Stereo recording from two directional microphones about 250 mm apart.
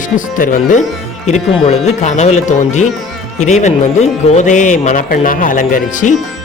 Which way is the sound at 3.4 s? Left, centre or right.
Left.